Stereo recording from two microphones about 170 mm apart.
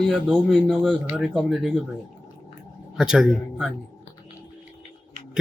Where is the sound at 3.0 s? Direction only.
5° right (ahead or behind).